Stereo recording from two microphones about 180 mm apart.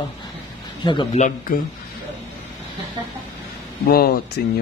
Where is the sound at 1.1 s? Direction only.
45° left (ahead or behind).